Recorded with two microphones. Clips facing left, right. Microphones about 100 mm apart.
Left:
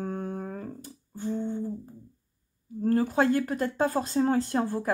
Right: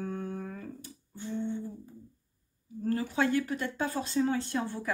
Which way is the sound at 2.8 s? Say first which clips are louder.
Left 5 dB; 45° left (ahead or behind).